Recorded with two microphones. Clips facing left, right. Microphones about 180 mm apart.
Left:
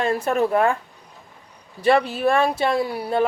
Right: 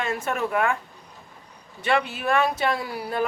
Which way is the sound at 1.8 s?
35° left (ahead or behind).